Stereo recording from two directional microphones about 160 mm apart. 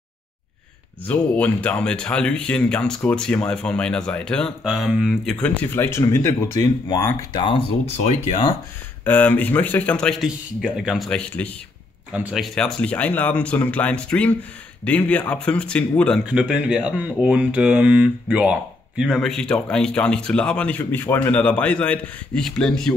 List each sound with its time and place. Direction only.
1.0 s speech: 10° left (ahead or behind); by 7.6 s 30° left (ahead or behind)
8.0 s speech: 45° left (ahead or behind)
9.0 s speech: 10° left (ahead or behind)
12.1 s speech: 5° right (ahead or behind)
16.3 s speech: 5° right (ahead or behind)